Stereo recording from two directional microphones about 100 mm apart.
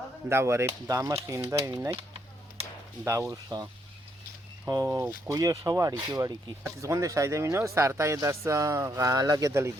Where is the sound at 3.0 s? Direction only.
25° right (ahead or behind).